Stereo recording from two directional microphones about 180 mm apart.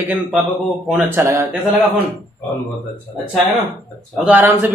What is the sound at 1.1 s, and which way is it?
Speech, 15° right (ahead or behind).